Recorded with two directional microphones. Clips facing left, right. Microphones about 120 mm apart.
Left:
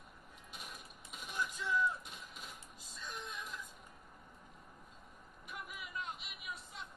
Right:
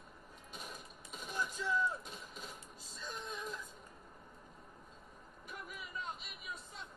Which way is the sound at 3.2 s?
35° right (ahead or behind).